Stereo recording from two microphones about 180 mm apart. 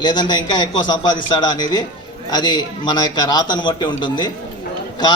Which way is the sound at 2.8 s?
25° left (ahead or behind).